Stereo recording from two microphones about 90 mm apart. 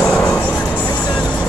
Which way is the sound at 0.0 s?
10° left (ahead or behind).